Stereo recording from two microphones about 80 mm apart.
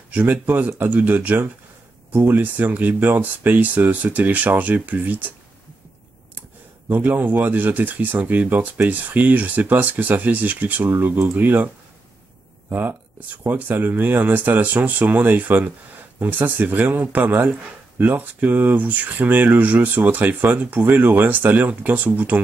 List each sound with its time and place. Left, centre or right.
0.1 s speech: centre
6.9 s speech: right